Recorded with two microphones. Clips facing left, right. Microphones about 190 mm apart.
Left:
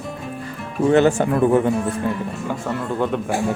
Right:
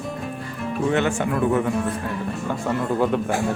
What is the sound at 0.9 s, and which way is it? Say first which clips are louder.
Speech: left 8 dB; 35° left (ahead or behind).